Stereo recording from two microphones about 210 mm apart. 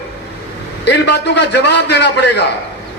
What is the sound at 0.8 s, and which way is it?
A man's voice, 55° left (ahead or behind).